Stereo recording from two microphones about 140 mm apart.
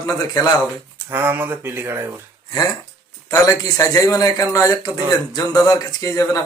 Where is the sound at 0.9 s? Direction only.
15° right (ahead or behind).